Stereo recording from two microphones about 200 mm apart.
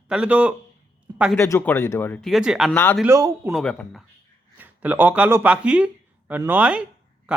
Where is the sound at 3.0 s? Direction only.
15° right (ahead or behind).